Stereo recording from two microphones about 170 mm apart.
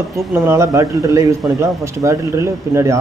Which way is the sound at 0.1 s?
15° right (ahead or behind).